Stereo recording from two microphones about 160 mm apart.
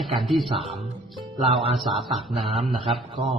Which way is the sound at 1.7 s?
Centre (ahead or behind).